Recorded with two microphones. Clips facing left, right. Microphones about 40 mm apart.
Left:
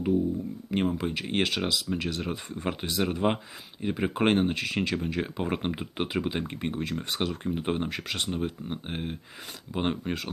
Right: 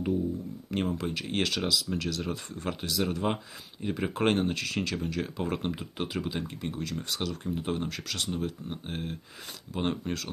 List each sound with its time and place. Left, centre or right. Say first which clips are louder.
0.7 s speech: left 3 dB; centre